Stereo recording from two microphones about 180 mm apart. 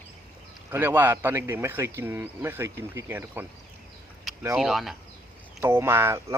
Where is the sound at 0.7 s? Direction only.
10° right (ahead or behind).